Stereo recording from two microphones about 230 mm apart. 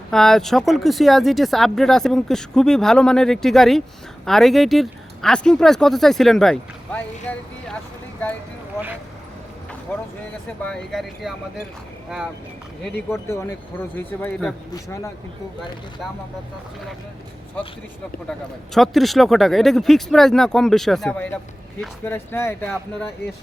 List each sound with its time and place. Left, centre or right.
0.1 s speech: centre
9.9 s speech: centre
13.2 s speech: centre
18.3 s speech: centre